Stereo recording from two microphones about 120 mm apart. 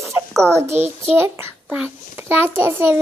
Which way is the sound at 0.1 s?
25° right (ahead or behind).